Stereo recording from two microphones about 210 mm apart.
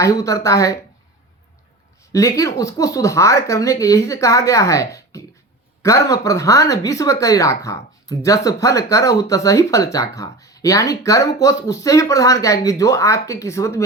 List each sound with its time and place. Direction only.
0.0 s speech: 15° left (ahead or behind)
2.1 s speech: 15° left (ahead or behind)